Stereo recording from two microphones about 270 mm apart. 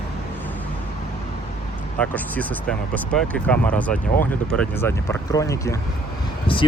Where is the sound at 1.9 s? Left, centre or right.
Centre.